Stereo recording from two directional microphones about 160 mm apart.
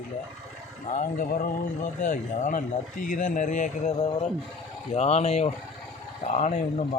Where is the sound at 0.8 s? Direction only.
55° left (ahead or behind).